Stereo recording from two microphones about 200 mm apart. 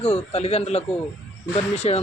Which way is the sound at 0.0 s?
30° left (ahead or behind).